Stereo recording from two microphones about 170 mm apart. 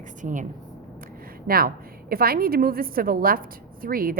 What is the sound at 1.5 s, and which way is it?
A woman's voice, 60° right (ahead or behind).